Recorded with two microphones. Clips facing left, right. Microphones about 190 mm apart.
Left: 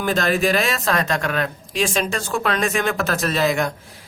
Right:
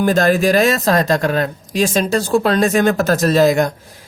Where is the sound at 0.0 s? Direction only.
45° right (ahead or behind).